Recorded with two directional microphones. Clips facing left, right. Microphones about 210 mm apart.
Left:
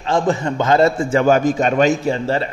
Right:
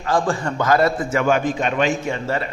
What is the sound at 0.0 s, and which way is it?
A man's voice, 25° left (ahead or behind).